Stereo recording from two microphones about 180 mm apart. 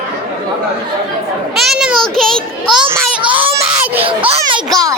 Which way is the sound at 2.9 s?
10° right (ahead or behind).